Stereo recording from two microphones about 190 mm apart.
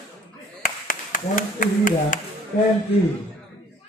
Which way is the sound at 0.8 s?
45° left (ahead or behind).